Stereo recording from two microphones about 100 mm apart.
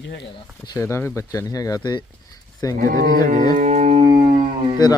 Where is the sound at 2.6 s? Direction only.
35° left (ahead or behind).